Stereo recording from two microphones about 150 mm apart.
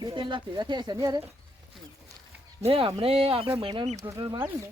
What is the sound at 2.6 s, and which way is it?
Speech, 40° right (ahead or behind).